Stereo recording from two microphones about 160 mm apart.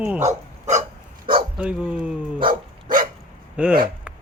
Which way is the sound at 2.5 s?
60° right (ahead or behind).